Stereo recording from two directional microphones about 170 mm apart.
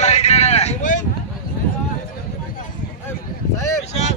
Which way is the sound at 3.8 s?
40° left (ahead or behind).